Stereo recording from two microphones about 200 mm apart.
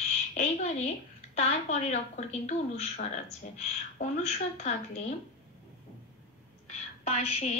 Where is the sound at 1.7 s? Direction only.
35° left (ahead or behind).